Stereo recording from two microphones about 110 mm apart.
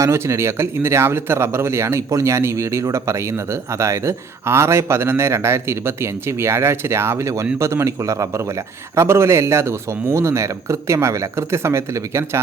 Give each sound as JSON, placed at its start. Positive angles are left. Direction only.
{"t": 0.0, "sound": "speech", "side_deg": -25}